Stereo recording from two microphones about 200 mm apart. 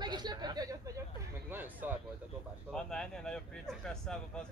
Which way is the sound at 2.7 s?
Centre (ahead or behind).